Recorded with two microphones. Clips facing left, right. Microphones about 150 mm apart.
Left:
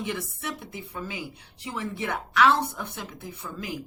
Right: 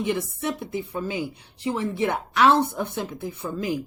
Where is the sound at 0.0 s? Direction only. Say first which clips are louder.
Right 7 dB; 20° right (ahead or behind).